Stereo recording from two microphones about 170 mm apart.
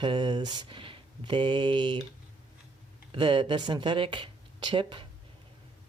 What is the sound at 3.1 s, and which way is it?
Speech, 30° right (ahead or behind).